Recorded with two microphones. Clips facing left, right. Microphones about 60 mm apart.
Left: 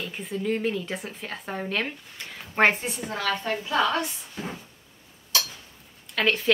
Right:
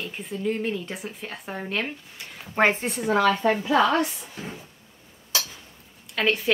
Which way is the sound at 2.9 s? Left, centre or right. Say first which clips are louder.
Right 4 dB; right.